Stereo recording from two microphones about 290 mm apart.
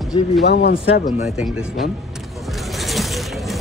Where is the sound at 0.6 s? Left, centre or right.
Left.